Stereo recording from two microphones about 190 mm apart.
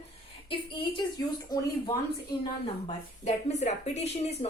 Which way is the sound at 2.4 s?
35° left (ahead or behind).